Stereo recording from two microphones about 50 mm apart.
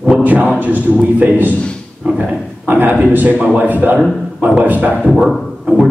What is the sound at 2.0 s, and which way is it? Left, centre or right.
Speech, centre.